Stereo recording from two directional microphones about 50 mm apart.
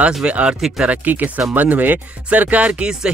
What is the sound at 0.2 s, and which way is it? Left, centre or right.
Speech, right.